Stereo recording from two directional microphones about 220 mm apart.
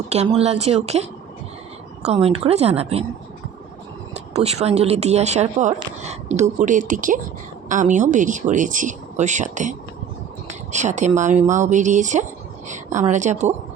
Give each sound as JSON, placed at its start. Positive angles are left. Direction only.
{"t": 0.1, "sound": "a woman's voice", "side_deg": -30}
{"t": 4.1, "sound": "speech", "side_deg": -30}